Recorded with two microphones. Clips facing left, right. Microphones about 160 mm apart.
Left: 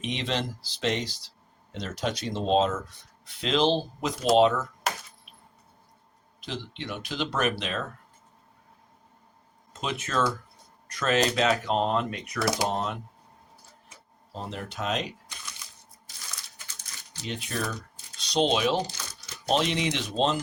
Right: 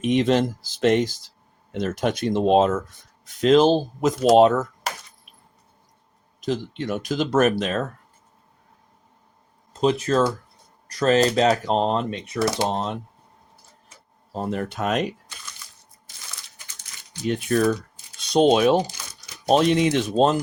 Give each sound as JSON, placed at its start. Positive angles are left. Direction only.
{"t": 0.0, "sound": "speech", "side_deg": -50}
{"t": 6.4, "sound": "speech", "side_deg": -45}
{"t": 9.8, "sound": "speech", "side_deg": -35}
{"t": 14.3, "sound": "speech", "side_deg": -50}
{"t": 17.2, "sound": "speech", "side_deg": -50}